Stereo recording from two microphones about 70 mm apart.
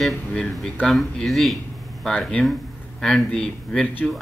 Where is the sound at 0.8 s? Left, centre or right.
Centre.